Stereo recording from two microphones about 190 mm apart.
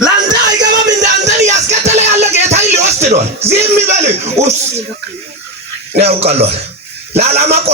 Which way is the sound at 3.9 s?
35° right (ahead or behind).